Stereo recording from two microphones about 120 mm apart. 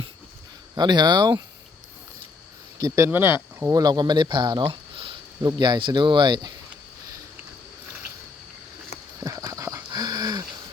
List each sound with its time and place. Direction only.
0.8 s speech: 35° right (ahead or behind)
2.7 s speech: 25° right (ahead or behind)
3.6 s speech: 30° right (ahead or behind); by 5.1 s 50° right (ahead or behind)
5.4 s speech: 35° right (ahead or behind)
9.2 s dog: 30° right (ahead or behind)